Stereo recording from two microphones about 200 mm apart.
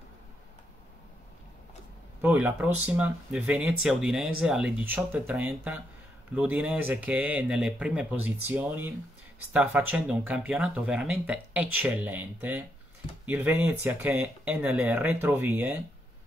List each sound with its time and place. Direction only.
2.2 s speech: 10° right (ahead or behind)